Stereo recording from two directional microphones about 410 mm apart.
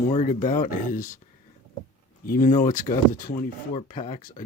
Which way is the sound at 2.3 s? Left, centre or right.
Left.